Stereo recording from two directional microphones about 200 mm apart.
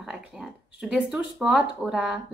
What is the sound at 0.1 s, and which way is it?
A woman's voice, 5° right (ahead or behind).